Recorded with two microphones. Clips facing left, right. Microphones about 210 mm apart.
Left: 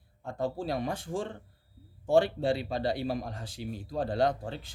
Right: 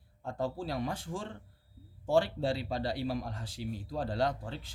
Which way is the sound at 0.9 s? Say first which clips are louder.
Left 3 dB; 15° left (ahead or behind).